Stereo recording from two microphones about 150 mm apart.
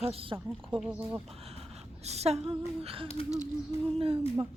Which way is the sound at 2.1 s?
45° right (ahead or behind).